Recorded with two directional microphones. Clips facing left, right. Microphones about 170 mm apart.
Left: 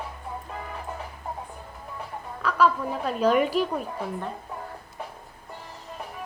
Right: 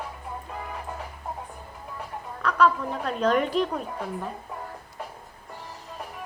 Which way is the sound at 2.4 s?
5° left (ahead or behind).